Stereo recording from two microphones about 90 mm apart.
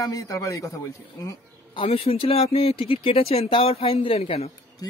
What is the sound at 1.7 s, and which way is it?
Speech, 85° left.